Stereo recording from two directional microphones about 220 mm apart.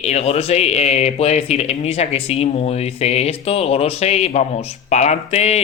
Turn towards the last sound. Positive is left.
turn(degrees=30)  # may be behind; listen again after turning